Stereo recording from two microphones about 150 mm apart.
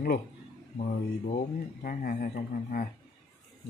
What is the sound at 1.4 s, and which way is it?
Speech, 70° left (ahead or behind).